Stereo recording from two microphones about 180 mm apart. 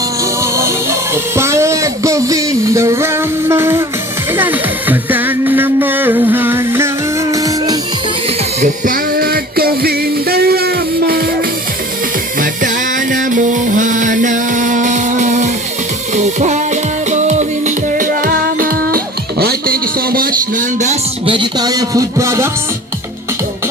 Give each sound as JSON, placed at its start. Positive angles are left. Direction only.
{"t": 0.5, "sound": "music", "side_deg": -15}
{"t": 8.6, "sound": "music", "side_deg": -45}
{"t": 12.4, "sound": "music", "side_deg": -45}
{"t": 21.2, "sound": "speech", "side_deg": -25}